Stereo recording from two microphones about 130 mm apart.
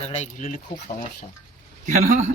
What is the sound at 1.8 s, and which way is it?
Speech, 70° right (ahead or behind).